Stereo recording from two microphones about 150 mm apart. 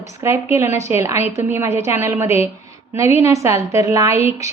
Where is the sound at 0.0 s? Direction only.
20° right (ahead or behind).